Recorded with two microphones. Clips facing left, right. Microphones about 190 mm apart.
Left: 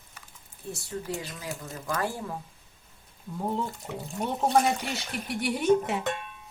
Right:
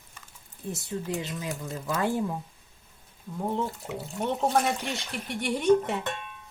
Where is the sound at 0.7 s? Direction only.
20° right (ahead or behind).